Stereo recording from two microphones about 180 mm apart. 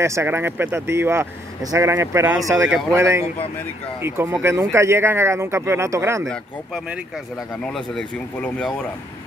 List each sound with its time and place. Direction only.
0.0 s speech: 15° right (ahead or behind)
7.6 s speech: 5° left (ahead or behind)